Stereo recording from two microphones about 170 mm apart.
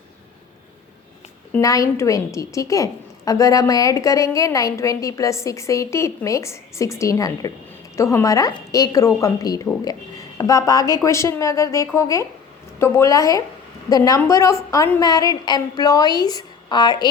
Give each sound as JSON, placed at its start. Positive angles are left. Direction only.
{"t": 1.5, "sound": "a woman's voice", "side_deg": 20}